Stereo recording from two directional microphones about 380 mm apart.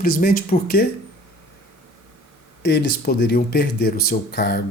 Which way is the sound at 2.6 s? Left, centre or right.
Left.